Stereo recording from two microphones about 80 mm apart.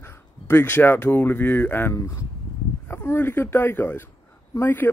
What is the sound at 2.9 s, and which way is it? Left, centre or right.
Speech, left.